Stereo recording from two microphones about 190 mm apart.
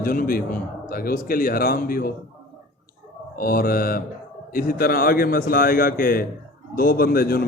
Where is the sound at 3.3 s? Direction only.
50° left (ahead or behind).